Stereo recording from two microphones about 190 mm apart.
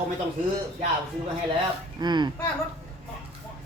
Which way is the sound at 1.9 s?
25° right (ahead or behind).